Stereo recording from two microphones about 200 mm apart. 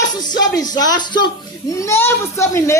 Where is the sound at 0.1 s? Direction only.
20° left (ahead or behind).